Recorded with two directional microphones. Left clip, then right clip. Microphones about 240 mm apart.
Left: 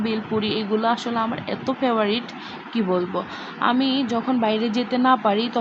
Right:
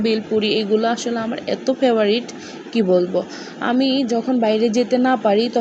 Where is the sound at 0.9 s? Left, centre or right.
Centre.